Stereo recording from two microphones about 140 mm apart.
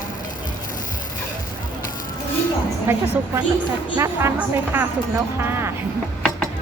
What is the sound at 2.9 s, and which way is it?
A woman's voice, 15° right (ahead or behind).